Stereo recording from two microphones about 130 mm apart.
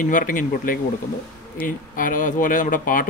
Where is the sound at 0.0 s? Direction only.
90° left.